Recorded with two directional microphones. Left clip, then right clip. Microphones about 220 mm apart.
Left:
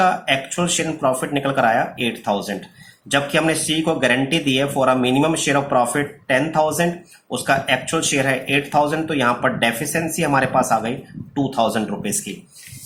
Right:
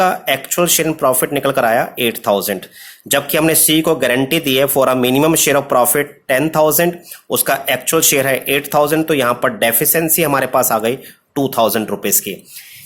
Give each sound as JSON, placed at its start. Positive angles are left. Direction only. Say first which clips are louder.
{"t": 0.0, "sound": "speech", "louder": "right 2 dB", "side_deg": -45}